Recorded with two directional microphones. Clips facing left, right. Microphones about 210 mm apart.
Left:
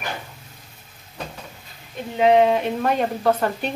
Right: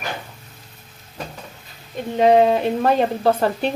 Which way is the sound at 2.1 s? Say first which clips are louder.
Right 2 dB; 35° right (ahead or behind).